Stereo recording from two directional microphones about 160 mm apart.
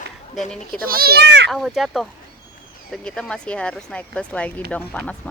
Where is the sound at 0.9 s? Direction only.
70° right (ahead or behind); by 1.5 s 90° right.